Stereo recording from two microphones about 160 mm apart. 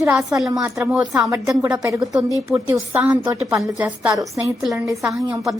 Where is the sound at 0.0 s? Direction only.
20° right (ahead or behind).